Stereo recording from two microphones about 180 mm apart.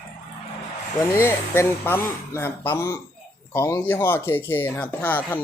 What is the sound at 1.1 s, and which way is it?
Speech, 15° left (ahead or behind).